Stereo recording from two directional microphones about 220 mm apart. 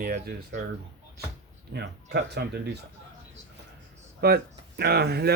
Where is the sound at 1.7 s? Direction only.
50° right (ahead or behind).